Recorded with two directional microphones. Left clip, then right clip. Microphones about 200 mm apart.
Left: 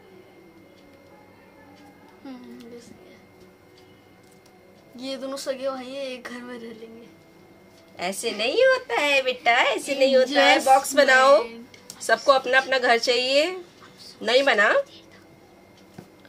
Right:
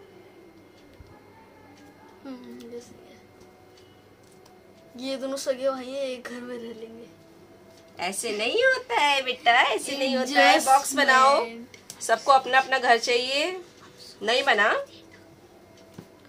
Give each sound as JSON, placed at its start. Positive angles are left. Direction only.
{"t": 2.2, "sound": "a sound", "side_deg": 5}
{"t": 4.9, "sound": "speech", "side_deg": 0}
{"t": 7.9, "sound": "a woman's voice", "side_deg": 35}